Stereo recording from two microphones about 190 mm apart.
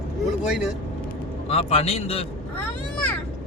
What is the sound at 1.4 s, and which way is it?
Speech, 30° left (ahead or behind).